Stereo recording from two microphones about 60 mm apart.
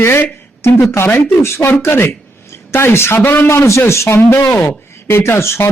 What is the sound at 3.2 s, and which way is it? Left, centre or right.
Speech, left.